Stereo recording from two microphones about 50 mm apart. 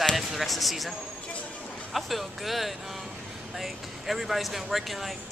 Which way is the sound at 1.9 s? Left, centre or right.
Centre.